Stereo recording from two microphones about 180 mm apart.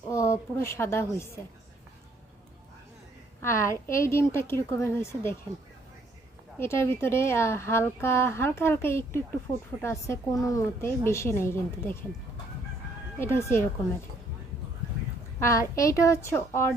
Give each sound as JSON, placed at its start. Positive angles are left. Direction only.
{"t": 0.1, "sound": "a woman's voice", "side_deg": 15}
{"t": 3.4, "sound": "speech", "side_deg": 15}
{"t": 6.6, "sound": "speech", "side_deg": 15}
{"t": 13.1, "sound": "speech", "side_deg": 15}
{"t": 15.4, "sound": "speech", "side_deg": 15}